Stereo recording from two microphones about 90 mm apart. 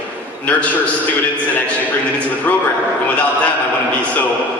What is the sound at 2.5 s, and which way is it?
Speech, 20° left (ahead or behind).